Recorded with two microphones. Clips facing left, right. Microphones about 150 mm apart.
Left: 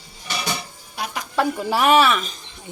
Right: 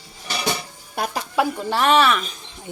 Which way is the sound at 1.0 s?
55° right (ahead or behind).